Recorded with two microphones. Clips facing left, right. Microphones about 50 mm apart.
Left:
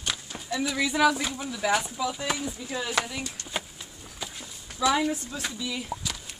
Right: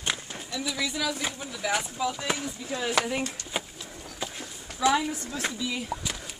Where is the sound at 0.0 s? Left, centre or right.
Right.